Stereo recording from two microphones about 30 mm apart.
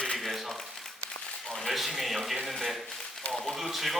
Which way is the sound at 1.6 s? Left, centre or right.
Centre.